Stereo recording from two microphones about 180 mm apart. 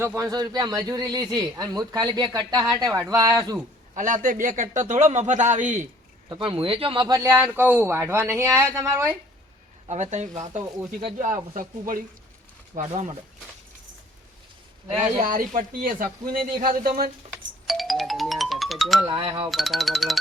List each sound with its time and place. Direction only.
0.0 s a man's voice: 15° right (ahead or behind)
3.9 s speech: 45° right (ahead or behind)
6.2 s speech: 25° right (ahead or behind)
9.9 s speech: 40° right (ahead or behind)
15.2 s speech: 50° right (ahead or behind)
17.7 s music: centre (ahead or behind)
19.0 s a man's voice: 25° right (ahead or behind)
19.5 s speech: centre (ahead or behind)